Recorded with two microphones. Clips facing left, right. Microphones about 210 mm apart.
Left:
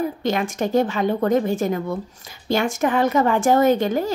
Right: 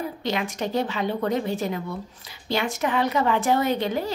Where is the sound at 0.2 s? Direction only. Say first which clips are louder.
Left 5 dB; 50° left (ahead or behind).